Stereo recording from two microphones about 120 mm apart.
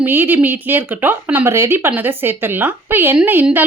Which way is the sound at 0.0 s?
15° right (ahead or behind).